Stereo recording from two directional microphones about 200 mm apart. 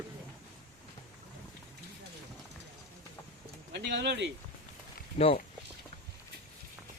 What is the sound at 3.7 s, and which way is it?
Speech, 60° right (ahead or behind).